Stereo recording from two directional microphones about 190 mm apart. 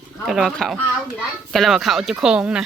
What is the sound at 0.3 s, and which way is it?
A child's voice, 5° right (ahead or behind).